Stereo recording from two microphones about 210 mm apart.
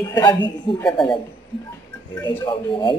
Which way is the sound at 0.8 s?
5° left (ahead or behind).